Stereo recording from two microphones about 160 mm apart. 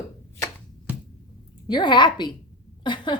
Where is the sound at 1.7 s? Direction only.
30° left (ahead or behind).